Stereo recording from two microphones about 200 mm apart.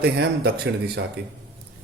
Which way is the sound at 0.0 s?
55° right (ahead or behind).